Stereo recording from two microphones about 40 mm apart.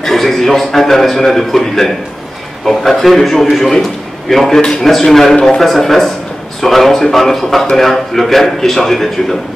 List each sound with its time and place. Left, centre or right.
0.0 s a man's voice: centre
5.3 s speech: left
5.6 s a man's voice: centre